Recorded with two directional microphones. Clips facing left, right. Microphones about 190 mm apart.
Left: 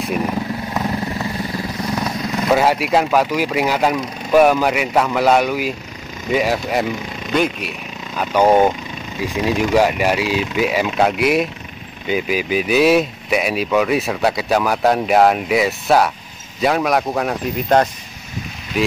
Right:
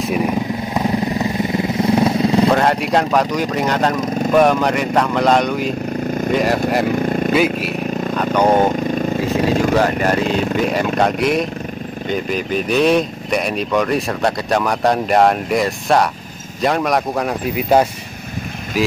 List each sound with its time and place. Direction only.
0.3 s vehicle: 15° right (ahead or behind)
2.5 s speech: 5° left (ahead or behind)
7.0 s vehicle: 50° right (ahead or behind)
7.3 s speech: 5° right (ahead or behind)
8.2 s speech: 10° left (ahead or behind)
8.7 s vehicle: 50° right (ahead or behind)
9.8 s speech: 10° left (ahead or behind)
10.2 s speech: 50° right (ahead or behind)
10.6 s speech: 5° left (ahead or behind)